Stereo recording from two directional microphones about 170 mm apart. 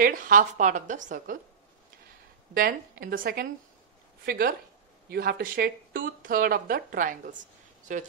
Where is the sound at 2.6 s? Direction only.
60° right (ahead or behind).